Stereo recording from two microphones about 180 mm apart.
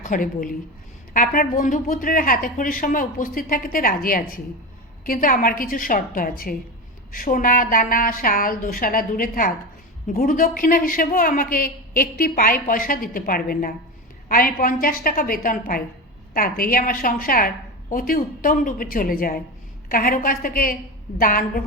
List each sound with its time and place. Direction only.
0.0 s a man's voice: 50° left (ahead or behind)